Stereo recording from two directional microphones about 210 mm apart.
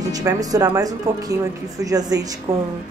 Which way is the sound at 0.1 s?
15° right (ahead or behind).